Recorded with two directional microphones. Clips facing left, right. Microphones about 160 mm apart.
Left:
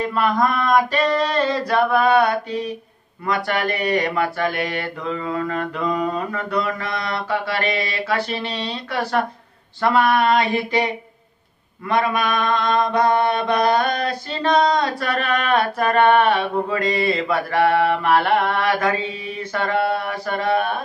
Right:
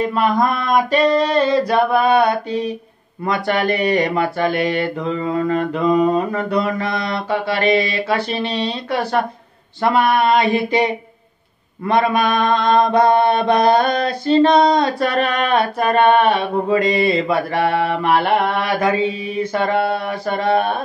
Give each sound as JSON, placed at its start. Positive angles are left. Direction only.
{"t": 0.0, "sound": "mantra", "side_deg": -20}
{"t": 9.8, "sound": "female singing", "side_deg": -20}
{"t": 11.9, "sound": "mantra", "side_deg": -25}